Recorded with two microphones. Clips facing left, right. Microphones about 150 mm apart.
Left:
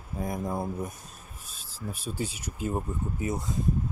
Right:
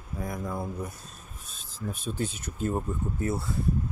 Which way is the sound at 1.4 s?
10° left (ahead or behind).